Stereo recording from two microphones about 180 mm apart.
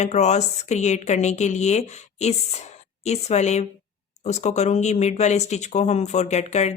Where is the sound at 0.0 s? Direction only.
40° left (ahead or behind).